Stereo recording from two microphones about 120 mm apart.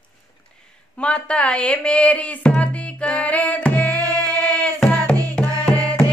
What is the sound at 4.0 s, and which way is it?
Music, 30° right (ahead or behind).